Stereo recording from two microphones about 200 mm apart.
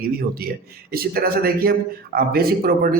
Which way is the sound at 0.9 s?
50° right (ahead or behind).